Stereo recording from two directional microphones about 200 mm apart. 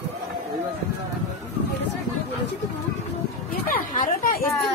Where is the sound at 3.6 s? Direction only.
40° left (ahead or behind).